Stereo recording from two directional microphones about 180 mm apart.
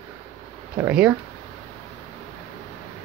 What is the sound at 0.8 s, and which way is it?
Speech, 10° right (ahead or behind).